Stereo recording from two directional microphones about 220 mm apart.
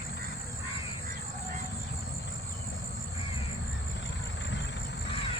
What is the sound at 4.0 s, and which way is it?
Vehicle, 55° left (ahead or behind).